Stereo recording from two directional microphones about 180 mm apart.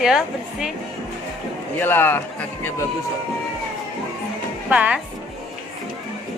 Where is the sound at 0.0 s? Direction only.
5° right (ahead or behind).